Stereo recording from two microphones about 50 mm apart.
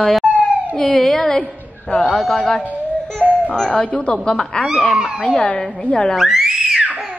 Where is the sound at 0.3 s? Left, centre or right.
Centre.